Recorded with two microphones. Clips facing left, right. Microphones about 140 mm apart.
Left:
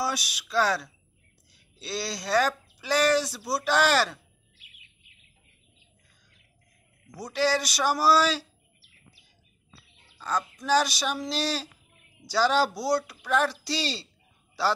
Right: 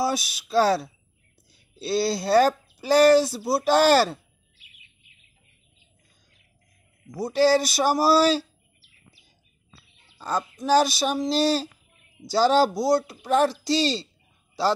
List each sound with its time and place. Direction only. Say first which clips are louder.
0.0 s speech: right 5 dB; 30° right (ahead or behind)
7.2 s speech: right 7 dB; 30° right (ahead or behind)
10.1 s speech: right 2 dB; 30° right (ahead or behind)
13.7 s a child's voice: right 10 dB; 5° left (ahead or behind)